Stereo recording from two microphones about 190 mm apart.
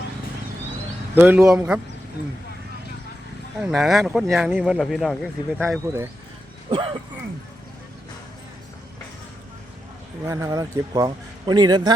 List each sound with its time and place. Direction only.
1.1 s speech: 10° right (ahead or behind)
3.6 s speech: centre (ahead or behind)
5.5 s speech: 10° right (ahead or behind)
6.7 s a man's voice: 30° right (ahead or behind)
10.2 s a man's voice: 15° right (ahead or behind)